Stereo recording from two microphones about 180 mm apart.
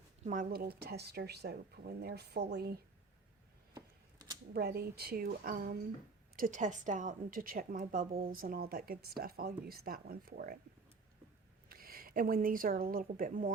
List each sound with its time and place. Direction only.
0.3 s speech: 55° right (ahead or behind)
3.8 s a sound: 20° right (ahead or behind)
4.5 s a woman's voice: 60° right (ahead or behind)
11.7 s speech: 55° right (ahead or behind)